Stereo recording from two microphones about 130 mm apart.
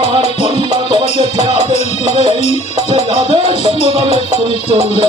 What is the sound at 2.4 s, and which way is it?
Music, 60° left (ahead or behind).